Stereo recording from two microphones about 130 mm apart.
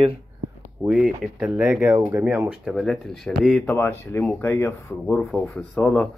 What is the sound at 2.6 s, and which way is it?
Speech, centre (ahead or behind).